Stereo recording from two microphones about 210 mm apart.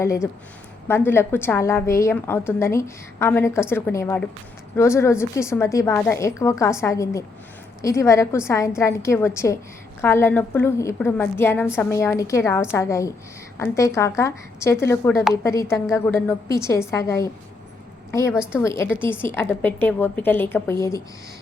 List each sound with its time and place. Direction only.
0.0 s a woman's voice: 15° left (ahead or behind)